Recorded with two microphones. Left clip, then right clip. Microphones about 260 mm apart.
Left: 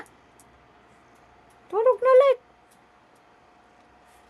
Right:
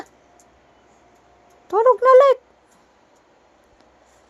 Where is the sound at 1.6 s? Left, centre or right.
Right.